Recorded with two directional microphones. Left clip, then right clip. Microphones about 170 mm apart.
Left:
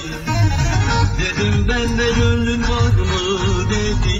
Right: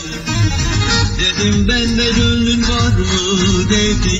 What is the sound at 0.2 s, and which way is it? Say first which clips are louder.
Music: right 2 dB; 10° right (ahead or behind).